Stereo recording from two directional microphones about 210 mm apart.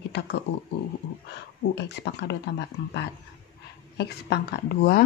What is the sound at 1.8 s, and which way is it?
A woman's voice, 55° left (ahead or behind).